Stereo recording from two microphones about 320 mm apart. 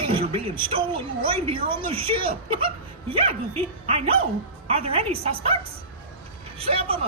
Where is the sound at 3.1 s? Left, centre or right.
Centre.